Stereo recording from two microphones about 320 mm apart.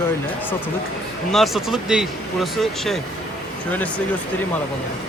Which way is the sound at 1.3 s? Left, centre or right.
Centre.